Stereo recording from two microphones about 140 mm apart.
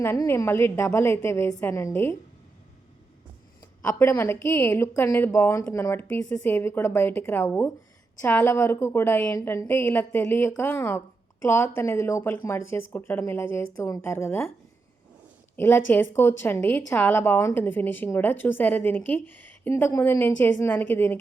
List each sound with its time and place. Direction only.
0.0 s a woman's voice: 20° left (ahead or behind)
3.8 s a woman's voice: 15° left (ahead or behind)
15.5 s a woman's voice: 15° left (ahead or behind)